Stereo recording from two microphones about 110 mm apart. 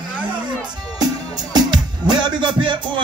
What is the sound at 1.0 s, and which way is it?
Music, 40° right (ahead or behind).